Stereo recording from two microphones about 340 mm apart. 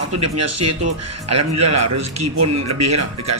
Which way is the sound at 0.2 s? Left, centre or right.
Right.